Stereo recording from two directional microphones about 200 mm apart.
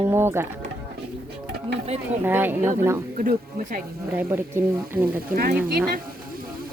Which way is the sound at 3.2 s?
40° right (ahead or behind).